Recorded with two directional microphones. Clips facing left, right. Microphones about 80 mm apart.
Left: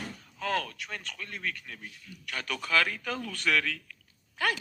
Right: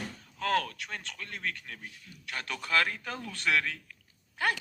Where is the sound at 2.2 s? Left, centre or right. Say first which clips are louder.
Left 1 dB; right.